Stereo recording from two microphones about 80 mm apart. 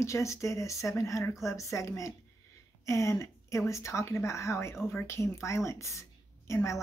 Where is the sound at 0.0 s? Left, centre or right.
Left.